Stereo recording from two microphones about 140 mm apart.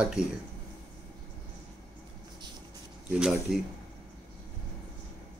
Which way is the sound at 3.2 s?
5° right (ahead or behind).